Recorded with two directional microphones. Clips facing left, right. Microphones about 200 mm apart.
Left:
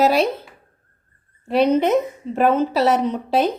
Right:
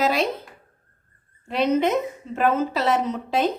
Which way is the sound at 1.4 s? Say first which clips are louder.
Left 4 dB; 35° left (ahead or behind).